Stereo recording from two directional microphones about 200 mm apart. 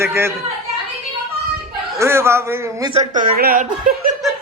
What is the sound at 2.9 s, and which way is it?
A woman's voice, 45° right (ahead or behind).